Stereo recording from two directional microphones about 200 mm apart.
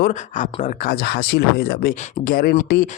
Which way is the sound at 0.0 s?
40° left (ahead or behind).